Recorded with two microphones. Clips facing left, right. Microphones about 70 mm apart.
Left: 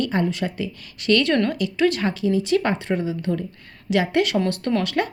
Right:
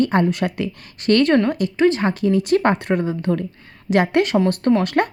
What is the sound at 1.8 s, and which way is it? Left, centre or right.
Speech, right.